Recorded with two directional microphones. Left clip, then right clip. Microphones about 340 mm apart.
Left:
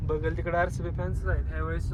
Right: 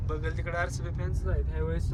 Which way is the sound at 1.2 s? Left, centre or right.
Centre.